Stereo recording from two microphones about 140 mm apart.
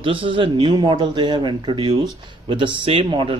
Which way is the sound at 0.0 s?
40° right (ahead or behind).